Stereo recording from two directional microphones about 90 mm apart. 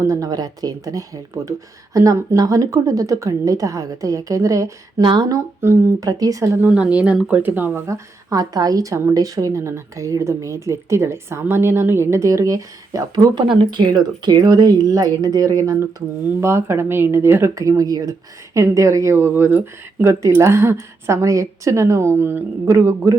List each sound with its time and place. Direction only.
0.0 s speech: 35° right (ahead or behind)
4.9 s speech: 55° right (ahead or behind)
6.0 s speech: 40° right (ahead or behind)
6.7 s speech: 10° right (ahead or behind)
7.9 s speech: 40° right (ahead or behind)